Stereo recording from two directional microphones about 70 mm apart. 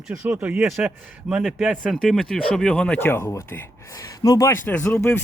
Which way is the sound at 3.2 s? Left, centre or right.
Left.